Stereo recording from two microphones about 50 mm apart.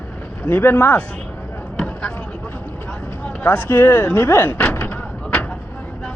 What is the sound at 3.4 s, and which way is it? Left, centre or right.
Speech, left.